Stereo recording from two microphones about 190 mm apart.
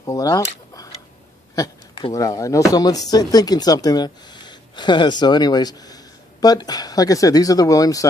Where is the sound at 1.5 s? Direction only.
20° left (ahead or behind).